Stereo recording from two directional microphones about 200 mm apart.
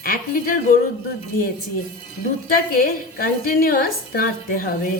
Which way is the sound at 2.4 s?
45° left (ahead or behind).